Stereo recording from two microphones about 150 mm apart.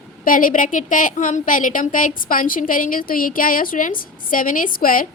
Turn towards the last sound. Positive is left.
turn(degrees=70)  # may be behind; listen again after turning